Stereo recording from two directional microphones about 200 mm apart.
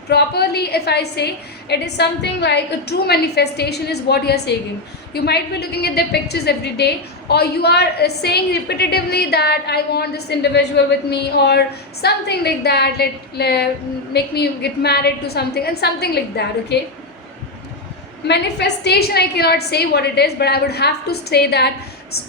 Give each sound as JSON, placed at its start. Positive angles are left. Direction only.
{"t": 0.1, "sound": "a woman's voice", "side_deg": 55}
{"t": 18.3, "sound": "a woman's voice", "side_deg": 60}